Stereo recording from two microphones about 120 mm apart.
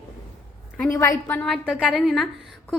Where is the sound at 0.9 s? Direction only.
25° left (ahead or behind).